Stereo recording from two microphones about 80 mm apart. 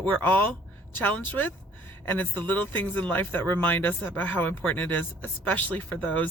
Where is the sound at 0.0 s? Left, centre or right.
Left.